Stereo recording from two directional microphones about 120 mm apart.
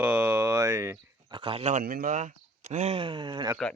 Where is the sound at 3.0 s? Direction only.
45° right (ahead or behind).